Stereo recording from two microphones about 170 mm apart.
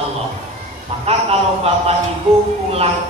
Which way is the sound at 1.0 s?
35° right (ahead or behind).